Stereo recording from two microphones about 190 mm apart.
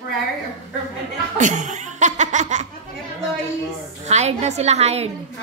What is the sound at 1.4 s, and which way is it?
Laughter, 40° right (ahead or behind).